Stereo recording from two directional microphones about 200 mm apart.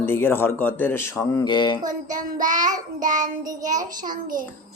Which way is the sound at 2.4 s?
40° right (ahead or behind).